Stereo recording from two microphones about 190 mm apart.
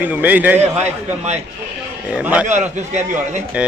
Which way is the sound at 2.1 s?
5° right (ahead or behind).